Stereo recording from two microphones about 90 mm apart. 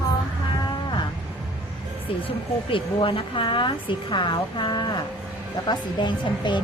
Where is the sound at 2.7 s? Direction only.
70° left (ahead or behind).